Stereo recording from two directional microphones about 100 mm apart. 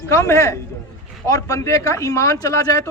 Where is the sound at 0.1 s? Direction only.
30° left (ahead or behind).